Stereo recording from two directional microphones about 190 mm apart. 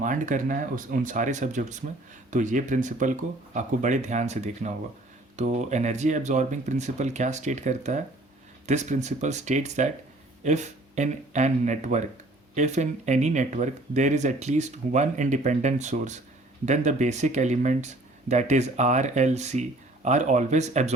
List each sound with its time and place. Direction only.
0.0 s speech: 45° right (ahead or behind)